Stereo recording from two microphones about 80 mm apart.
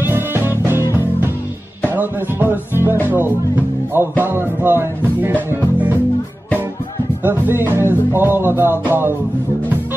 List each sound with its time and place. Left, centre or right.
0.1 s music: right
2.0 s music: right
7.2 s music: right